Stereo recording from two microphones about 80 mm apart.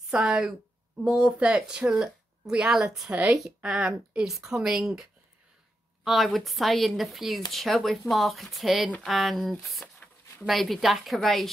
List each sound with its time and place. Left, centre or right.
0.1 s speech: centre
3.1 s a woman's voice: centre
6.0 s speech: centre